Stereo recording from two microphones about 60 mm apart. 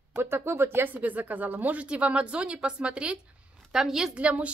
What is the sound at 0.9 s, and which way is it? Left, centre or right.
A woman's voice, right.